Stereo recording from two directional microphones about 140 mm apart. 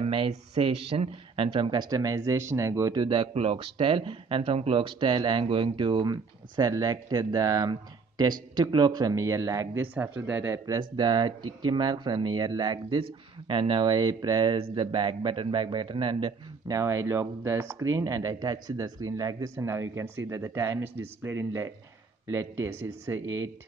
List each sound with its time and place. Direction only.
0.0 s a sound: 40° right (ahead or behind)
0.3 s a man's voice: 40° right (ahead or behind); by 10.8 s 15° right (ahead or behind)
10.8 s a man's voice: 30° right (ahead or behind)